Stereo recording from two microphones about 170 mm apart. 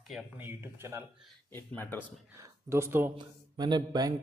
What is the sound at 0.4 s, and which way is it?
Speech, 10° right (ahead or behind).